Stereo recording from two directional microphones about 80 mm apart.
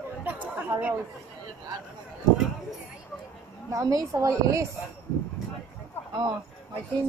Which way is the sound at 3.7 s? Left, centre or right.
Right.